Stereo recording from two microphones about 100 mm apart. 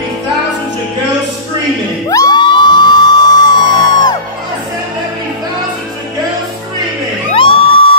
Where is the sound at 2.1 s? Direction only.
35° left (ahead or behind).